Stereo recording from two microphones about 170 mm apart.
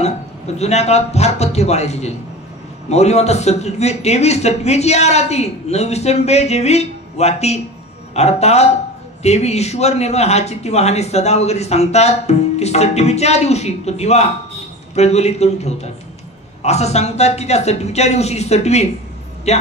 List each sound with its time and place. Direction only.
0.6 s speech: 40° left (ahead or behind)